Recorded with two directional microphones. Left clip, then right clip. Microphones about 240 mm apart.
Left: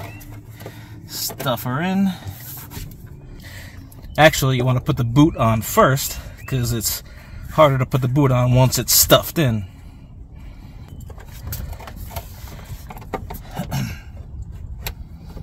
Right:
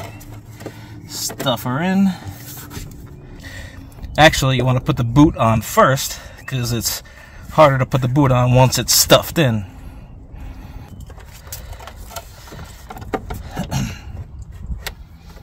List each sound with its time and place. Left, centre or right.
1.1 s speech: centre
4.1 s speech: centre
11.8 s vehicle: centre